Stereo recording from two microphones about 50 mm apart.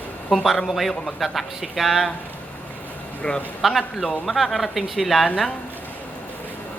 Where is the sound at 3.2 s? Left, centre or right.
Left.